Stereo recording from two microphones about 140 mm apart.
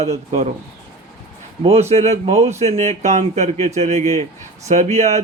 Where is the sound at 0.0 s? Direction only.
50° right (ahead or behind).